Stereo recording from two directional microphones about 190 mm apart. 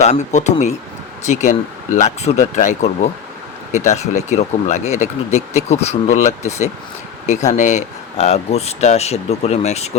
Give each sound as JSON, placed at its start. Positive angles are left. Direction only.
{"t": 0.0, "sound": "speech", "side_deg": 35}